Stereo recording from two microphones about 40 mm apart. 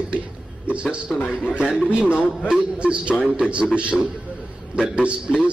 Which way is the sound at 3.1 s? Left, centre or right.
Centre.